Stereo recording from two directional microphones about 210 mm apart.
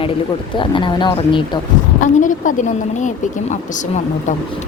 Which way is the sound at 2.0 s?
40° left (ahead or behind).